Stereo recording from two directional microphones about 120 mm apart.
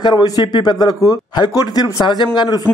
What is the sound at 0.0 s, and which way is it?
A man's voice, 35° left (ahead or behind).